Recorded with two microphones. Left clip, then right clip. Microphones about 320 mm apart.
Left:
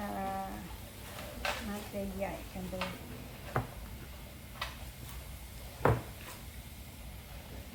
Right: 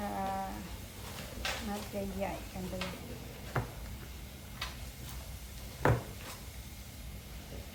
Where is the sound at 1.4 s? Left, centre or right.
Centre.